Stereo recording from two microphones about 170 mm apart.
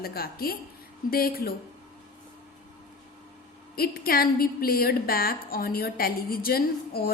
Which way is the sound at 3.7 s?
60° left (ahead or behind).